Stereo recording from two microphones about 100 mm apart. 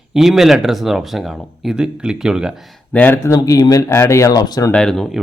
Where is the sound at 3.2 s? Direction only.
35° left (ahead or behind).